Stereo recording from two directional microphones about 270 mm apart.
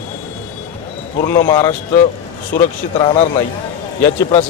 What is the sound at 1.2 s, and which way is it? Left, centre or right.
Speech, centre.